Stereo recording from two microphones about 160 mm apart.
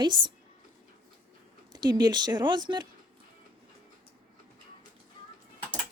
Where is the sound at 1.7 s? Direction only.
25° right (ahead or behind).